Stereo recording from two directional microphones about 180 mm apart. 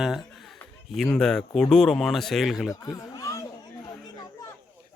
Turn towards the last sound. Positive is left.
turn(degrees=20)  # may be behind; listen again after turning